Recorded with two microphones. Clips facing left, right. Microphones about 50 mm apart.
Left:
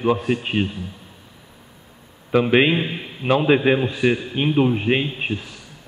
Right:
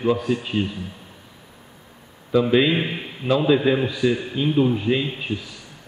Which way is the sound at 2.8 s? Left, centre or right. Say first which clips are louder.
Even; centre.